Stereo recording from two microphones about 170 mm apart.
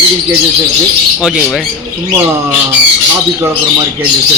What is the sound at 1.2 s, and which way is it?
Speech, centre (ahead or behind).